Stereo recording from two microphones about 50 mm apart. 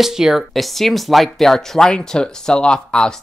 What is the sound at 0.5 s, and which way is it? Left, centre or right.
Speech, centre.